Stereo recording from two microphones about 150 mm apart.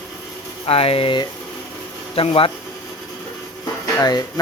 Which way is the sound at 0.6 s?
40° left (ahead or behind).